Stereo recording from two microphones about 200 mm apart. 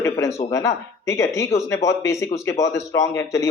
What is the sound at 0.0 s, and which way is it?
A man's voice, 15° left (ahead or behind).